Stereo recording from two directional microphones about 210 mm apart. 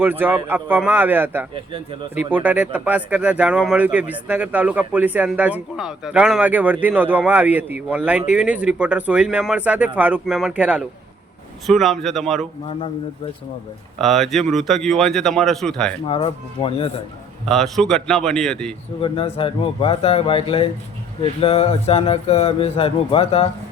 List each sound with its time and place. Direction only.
0.0 s a man's voice: 10° right (ahead or behind)
12.6 s speech: 25° left (ahead or behind)
14.0 s a man's voice: centre (ahead or behind)
16.0 s speech: 25° left (ahead or behind)
17.4 s a man's voice: centre (ahead or behind)
19.0 s speech: 25° left (ahead or behind)